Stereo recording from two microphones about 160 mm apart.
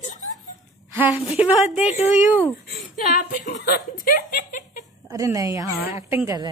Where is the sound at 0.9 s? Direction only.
10° right (ahead or behind).